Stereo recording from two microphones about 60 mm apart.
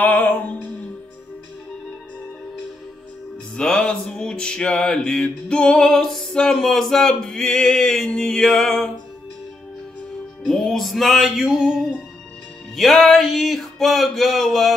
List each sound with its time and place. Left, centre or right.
0.0 s music: left
3.5 s a sound: centre
10.4 s music: centre
12.7 s music: centre